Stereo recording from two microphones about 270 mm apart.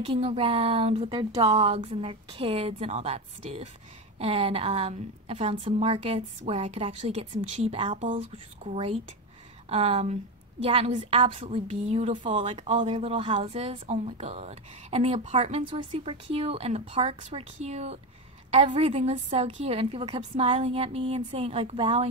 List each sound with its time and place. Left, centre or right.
0.0 s a woman's voice: right